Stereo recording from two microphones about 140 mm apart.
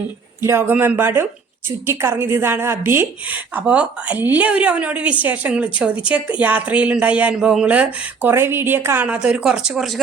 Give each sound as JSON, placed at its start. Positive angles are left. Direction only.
{"t": 0.4, "sound": "a woman's voice", "side_deg": -15}